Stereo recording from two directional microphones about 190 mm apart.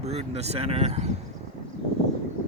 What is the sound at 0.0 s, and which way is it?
Speech, 35° right (ahead or behind).